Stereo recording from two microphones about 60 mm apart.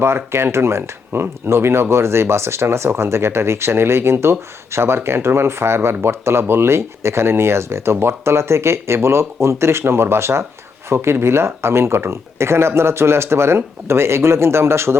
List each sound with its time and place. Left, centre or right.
0.0 s speech: right